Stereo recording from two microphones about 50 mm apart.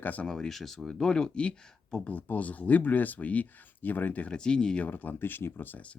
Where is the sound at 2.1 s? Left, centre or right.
Left.